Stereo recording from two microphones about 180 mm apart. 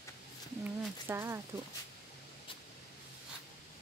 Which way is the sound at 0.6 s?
10° right (ahead or behind).